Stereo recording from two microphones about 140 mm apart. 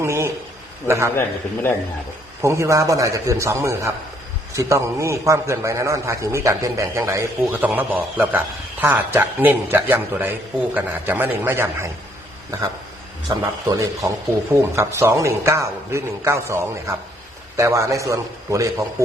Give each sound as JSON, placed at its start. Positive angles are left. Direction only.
{"t": 0.0, "sound": "a sound", "side_deg": -20}
{"t": 0.9, "sound": "a man's voice", "side_deg": -20}
{"t": 2.4, "sound": "a man's voice", "side_deg": -20}
{"t": 13.2, "sound": "a man's voice", "side_deg": -25}